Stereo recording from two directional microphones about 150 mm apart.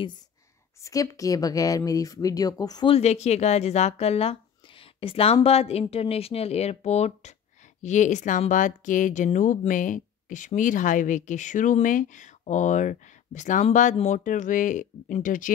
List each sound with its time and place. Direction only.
0.7 s speech: 20° left (ahead or behind)
2.9 s speech: 45° left (ahead or behind); by 15.5 s 60° left (ahead or behind)